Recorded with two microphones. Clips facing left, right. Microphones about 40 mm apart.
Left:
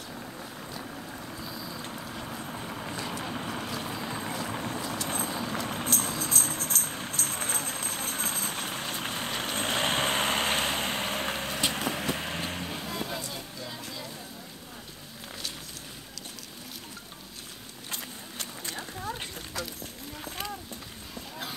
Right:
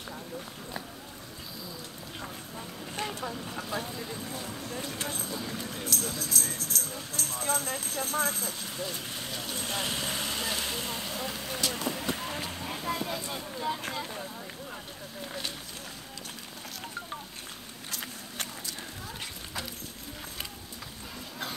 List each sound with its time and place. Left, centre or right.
2.5 s vehicle: left
4.5 s boat: left
5.0 s run: left
5.5 s music: left
13.2 s vehicle: right
18.7 s horse: left